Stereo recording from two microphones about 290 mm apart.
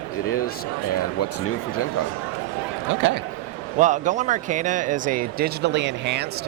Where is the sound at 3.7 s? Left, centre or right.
Right.